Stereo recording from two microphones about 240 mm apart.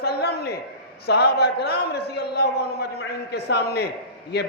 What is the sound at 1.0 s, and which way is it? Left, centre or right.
A man's voice, left.